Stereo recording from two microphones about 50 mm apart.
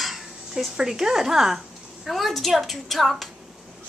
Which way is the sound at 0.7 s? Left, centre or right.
Centre.